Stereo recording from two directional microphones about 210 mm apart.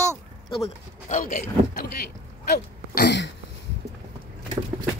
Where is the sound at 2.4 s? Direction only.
50° left (ahead or behind).